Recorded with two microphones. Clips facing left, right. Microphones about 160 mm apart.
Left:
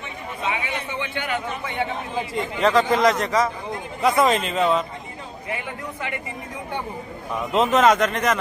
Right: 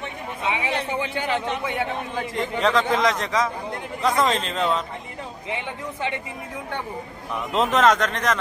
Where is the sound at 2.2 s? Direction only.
5° left (ahead or behind).